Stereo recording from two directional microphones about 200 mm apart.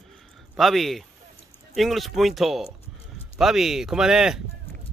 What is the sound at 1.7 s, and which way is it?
Speech, centre (ahead or behind).